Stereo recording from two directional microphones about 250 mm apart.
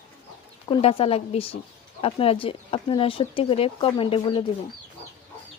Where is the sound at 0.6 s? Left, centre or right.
Left.